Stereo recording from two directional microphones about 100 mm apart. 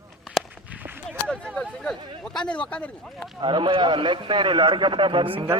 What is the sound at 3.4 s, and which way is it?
A man's voice, 55° right (ahead or behind).